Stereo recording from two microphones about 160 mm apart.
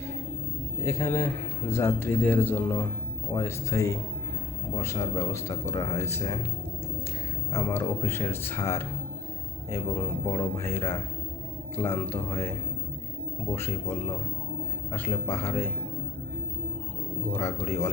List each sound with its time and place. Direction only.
0.9 s a man's voice: 20° left (ahead or behind)
7.5 s a man's voice: 15° left (ahead or behind)
14.9 s a man's voice: 15° left (ahead or behind)
17.3 s a man's voice: 15° left (ahead or behind)